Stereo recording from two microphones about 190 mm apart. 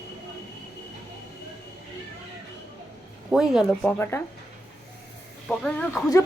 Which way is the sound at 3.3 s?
5° right (ahead or behind).